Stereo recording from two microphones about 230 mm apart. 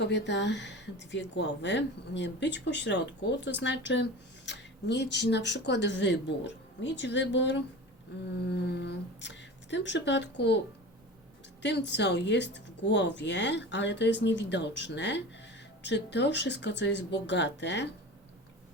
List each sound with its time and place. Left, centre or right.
0.0 s a woman's voice: left
8.7 s a woman's voice: left
11.6 s a woman's voice: left